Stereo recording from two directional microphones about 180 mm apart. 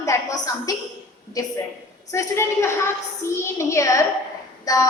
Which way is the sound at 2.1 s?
15° left (ahead or behind).